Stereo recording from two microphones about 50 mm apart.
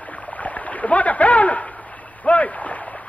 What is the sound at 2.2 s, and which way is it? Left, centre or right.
Splash, left.